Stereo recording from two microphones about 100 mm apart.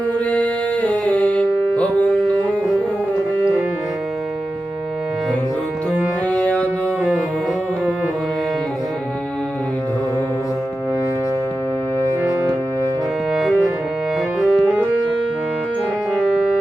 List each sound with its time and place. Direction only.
0.3 s music: 10° left (ahead or behind)
14.3 s music: 5° right (ahead or behind)